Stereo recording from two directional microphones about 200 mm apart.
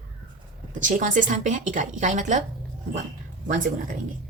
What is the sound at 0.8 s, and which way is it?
A woman's voice, 40° right (ahead or behind).